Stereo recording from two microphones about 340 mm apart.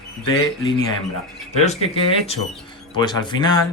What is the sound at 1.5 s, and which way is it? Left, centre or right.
Speech, centre.